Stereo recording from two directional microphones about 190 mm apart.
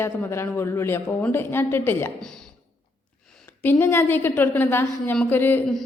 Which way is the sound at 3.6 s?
10° left (ahead or behind).